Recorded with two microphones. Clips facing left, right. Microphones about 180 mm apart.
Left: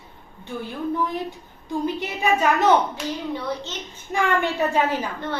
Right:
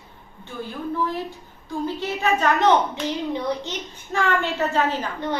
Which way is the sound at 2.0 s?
10° left (ahead or behind).